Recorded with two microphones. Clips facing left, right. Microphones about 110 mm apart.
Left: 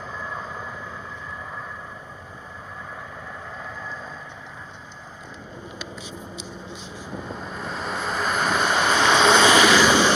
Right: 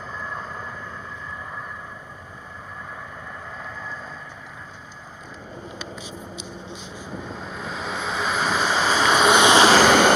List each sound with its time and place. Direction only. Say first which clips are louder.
0.2 s vehicle: even; 5° left (ahead or behind)
7.2 s vehicle: left 2 dB; centre (ahead or behind)
9.4 s vehicle: right 1 dB; 25° right (ahead or behind)
9.8 s vehicle: right 3 dB; 55° right (ahead or behind)